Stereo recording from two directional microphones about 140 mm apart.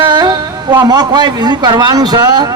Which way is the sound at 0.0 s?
35° right (ahead or behind).